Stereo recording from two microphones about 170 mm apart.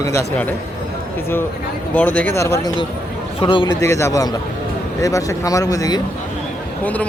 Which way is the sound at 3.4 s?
30° left (ahead or behind).